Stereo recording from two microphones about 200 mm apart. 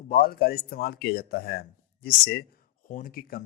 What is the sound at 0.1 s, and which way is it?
Speech, 45° left (ahead or behind).